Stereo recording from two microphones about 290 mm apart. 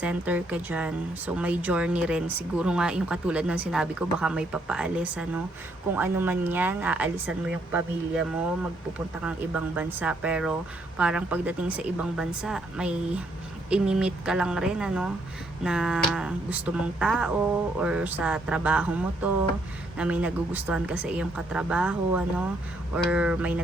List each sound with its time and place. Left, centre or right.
0.0 s speech: centre